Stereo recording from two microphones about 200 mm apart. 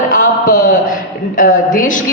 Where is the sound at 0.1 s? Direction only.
40° left (ahead or behind).